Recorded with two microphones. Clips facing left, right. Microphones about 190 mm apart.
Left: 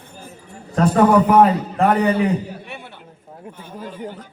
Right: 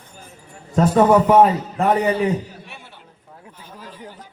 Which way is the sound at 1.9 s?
60° left (ahead or behind).